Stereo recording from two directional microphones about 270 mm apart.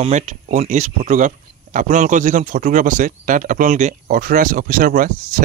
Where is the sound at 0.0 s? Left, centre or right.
Right.